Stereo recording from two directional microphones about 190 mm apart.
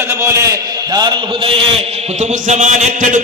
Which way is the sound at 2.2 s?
40° right (ahead or behind).